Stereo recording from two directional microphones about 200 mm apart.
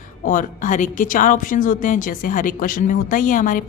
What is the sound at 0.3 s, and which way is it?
A woman's voice, 40° left (ahead or behind).